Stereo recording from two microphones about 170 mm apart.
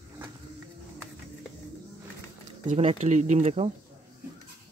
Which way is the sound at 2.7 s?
40° right (ahead or behind).